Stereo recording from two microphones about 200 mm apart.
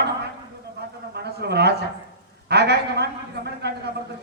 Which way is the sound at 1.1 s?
55° right (ahead or behind).